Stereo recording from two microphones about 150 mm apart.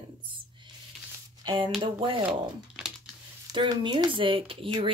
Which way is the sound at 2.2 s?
5° right (ahead or behind).